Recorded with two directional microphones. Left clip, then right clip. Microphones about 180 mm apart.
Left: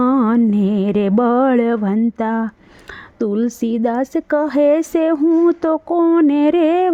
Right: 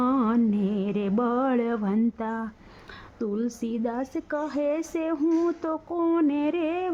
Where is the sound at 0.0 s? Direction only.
40° left (ahead or behind).